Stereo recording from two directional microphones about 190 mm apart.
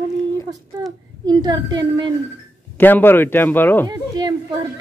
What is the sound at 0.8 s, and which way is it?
A child's voice, 20° right (ahead or behind).